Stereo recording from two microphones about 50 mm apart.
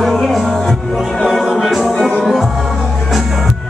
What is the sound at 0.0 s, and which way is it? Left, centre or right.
Music, centre.